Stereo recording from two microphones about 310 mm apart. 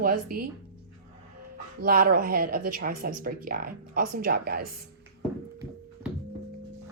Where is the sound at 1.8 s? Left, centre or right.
Right.